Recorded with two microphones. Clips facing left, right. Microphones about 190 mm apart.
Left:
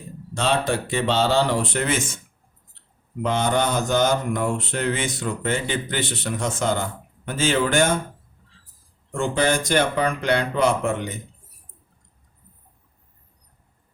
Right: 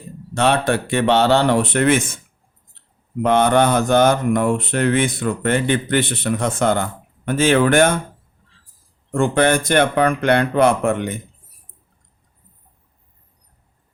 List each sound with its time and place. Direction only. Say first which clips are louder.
0.3 s speech: right 5 dB; 65° right (ahead or behind)
3.2 s speech: right 7 dB; 60° right (ahead or behind)
9.1 s speech: right 5 dB; 60° right (ahead or behind)